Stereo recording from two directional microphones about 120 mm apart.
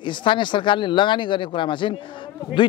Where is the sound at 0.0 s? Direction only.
40° left (ahead or behind).